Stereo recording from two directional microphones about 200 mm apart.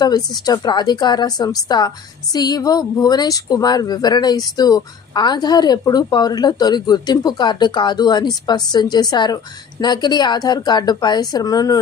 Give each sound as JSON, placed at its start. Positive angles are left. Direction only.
{"t": 0.0, "sound": "speech", "side_deg": 20}